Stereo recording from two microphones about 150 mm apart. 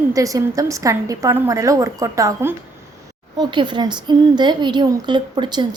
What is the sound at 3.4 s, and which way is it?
A woman's voice, 30° right (ahead or behind).